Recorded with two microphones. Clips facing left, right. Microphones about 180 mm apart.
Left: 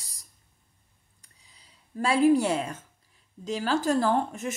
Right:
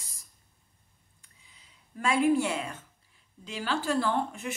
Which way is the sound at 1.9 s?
35° left (ahead or behind).